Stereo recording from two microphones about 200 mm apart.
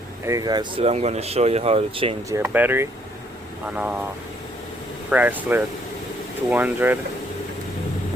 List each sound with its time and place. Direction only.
0.3 s speech: 20° right (ahead or behind)
2.3 s speech: 10° right (ahead or behind)
5.1 s speech: 10° right (ahead or behind)